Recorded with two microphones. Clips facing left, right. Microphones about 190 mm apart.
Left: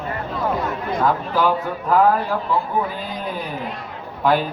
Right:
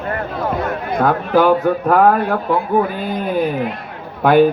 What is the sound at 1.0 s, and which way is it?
Speech, 60° right (ahead or behind).